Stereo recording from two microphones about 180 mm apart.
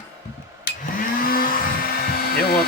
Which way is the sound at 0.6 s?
50° left (ahead or behind).